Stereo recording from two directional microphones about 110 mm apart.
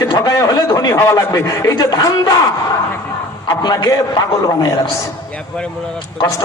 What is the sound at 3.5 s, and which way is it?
Speech, 35° left (ahead or behind).